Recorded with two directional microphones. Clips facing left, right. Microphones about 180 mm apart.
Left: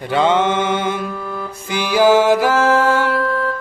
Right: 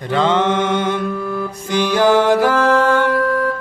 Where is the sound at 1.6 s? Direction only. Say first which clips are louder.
Left 1 dB; 5° left (ahead or behind).